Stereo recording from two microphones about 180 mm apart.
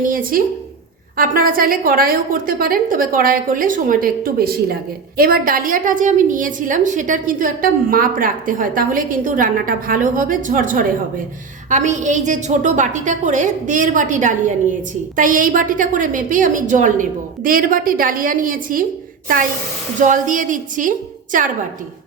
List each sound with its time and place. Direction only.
0.0 s a woman's voice: 50° right (ahead or behind)
20.0 s a woman's voice: 45° right (ahead or behind)